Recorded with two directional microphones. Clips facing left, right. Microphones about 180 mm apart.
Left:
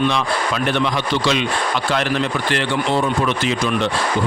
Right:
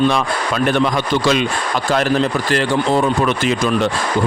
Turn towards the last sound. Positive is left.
turn(degrees=-45)  # may be behind; listen again after turning